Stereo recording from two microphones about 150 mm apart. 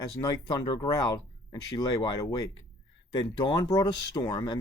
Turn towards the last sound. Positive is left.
turn(degrees=30)  # may be behind; listen again after turning